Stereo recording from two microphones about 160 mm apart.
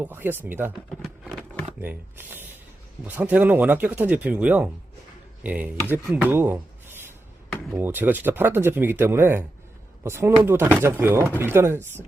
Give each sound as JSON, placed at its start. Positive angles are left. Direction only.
{"t": 0.0, "sound": "speech", "side_deg": -10}
{"t": 0.9, "sound": "a sound", "side_deg": 0}
{"t": 1.8, "sound": "speech", "side_deg": -10}